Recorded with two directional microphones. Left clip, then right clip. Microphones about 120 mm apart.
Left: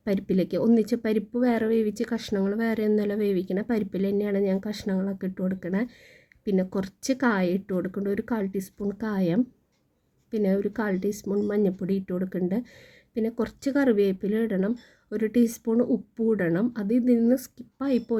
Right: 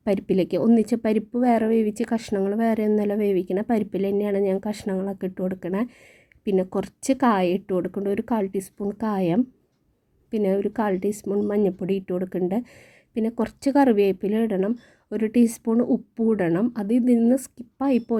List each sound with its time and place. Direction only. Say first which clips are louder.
0.0 s a woman's voice: right 4 dB; 20° right (ahead or behind)